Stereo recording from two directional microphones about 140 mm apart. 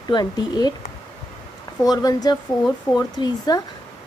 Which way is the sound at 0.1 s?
30° left (ahead or behind).